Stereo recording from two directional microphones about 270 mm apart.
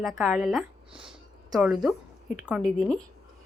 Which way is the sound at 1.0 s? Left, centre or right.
Centre.